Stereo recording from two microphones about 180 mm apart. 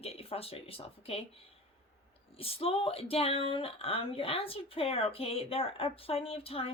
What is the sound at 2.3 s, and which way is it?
A woman's voice, 30° left (ahead or behind).